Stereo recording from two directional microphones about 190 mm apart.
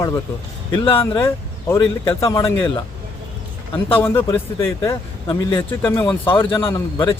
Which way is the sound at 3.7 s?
10° left (ahead or behind).